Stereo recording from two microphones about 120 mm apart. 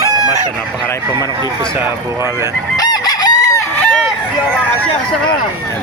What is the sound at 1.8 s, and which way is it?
Speech, 20° right (ahead or behind).